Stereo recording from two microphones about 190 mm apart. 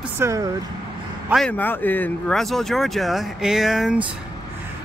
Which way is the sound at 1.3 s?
5° left (ahead or behind).